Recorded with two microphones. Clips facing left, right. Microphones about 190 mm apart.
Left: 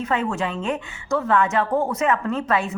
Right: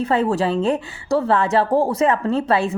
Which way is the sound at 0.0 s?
35° right (ahead or behind).